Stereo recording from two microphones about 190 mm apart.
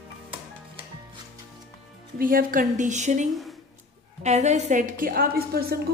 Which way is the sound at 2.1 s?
50° right (ahead or behind).